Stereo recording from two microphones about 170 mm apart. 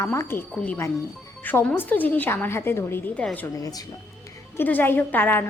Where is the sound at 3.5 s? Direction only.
20° left (ahead or behind).